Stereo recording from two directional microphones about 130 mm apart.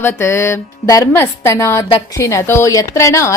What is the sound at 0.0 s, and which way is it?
Speech, 20° left (ahead or behind).